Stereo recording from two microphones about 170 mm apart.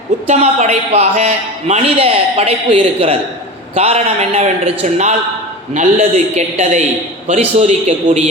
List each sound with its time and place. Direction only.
0.3 s a man's voice: 40° right (ahead or behind)